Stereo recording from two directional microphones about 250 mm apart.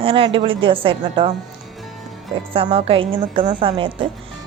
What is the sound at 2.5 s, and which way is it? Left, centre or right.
Speech, right.